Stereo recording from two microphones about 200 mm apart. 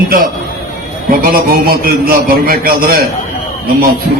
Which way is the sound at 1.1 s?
45° right (ahead or behind).